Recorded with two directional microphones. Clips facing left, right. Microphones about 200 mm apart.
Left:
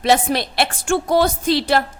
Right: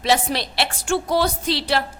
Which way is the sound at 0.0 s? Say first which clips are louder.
Left 4 dB; 50° left (ahead or behind).